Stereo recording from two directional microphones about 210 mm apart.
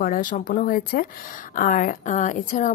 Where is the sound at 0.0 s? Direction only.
40° left (ahead or behind).